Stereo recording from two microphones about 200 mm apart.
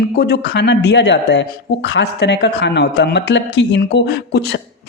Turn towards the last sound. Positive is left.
turn(degrees=55)  # may be behind; listen again after turning